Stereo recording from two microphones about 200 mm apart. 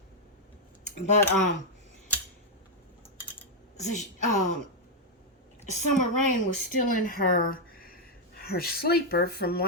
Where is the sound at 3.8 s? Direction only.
40° left (ahead or behind).